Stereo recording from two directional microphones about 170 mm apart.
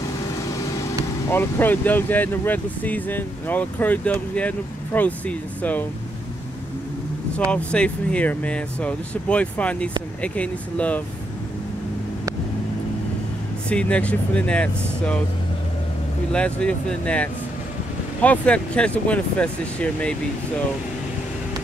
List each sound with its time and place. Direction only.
0.0 s vehicle: 20° left (ahead or behind)
1.3 s speech: 10° left (ahead or behind)
7.3 s speech: 5° left (ahead or behind)
13.7 s speech: 5° left (ahead or behind)
16.3 s speech: 5° left (ahead or behind)